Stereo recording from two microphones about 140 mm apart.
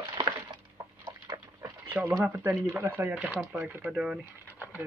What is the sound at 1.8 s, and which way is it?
Speech, 10° right (ahead or behind).